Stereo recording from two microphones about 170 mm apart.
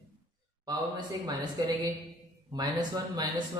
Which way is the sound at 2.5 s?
25° right (ahead or behind).